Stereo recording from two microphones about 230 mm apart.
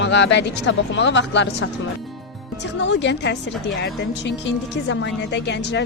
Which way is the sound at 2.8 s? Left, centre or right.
Left.